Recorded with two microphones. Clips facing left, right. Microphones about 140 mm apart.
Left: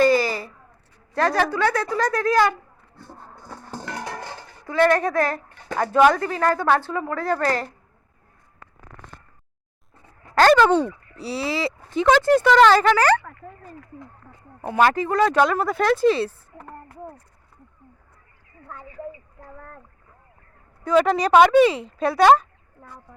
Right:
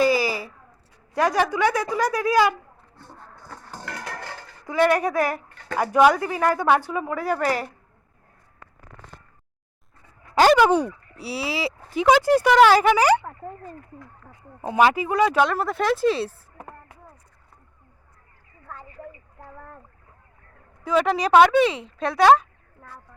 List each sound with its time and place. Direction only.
0.0 s a sound: 10° right (ahead or behind)
1.1 s speech: 15° right (ahead or behind)
3.9 s dishes: 20° left (ahead or behind)
4.6 s speech: 15° right (ahead or behind)
10.3 s speech: 10° right (ahead or behind)
14.7 s speech: 10° right (ahead or behind)
20.8 s speech: centre (ahead or behind)